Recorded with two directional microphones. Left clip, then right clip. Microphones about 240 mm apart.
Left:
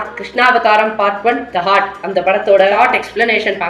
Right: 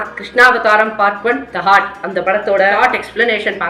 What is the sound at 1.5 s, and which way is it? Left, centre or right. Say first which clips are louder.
Speech: right 4 dB; right.